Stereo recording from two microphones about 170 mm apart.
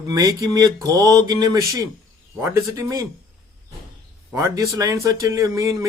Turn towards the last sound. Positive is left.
turn(degrees=-20)  # may be behind; listen again after turning